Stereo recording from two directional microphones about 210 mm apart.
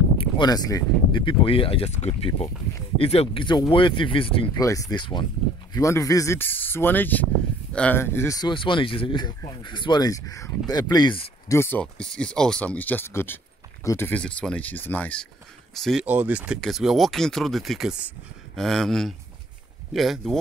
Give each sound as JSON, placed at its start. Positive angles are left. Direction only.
{"t": 0.2, "sound": "speech", "side_deg": 20}